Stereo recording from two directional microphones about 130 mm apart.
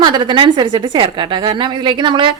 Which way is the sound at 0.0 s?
35° right (ahead or behind).